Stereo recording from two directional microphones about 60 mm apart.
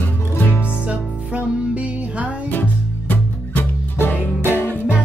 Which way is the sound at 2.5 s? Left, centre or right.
Left.